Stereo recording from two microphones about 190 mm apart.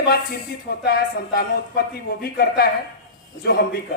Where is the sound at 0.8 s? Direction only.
55° left (ahead or behind).